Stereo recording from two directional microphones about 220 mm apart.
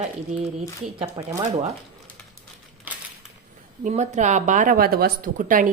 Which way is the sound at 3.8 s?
35° right (ahead or behind).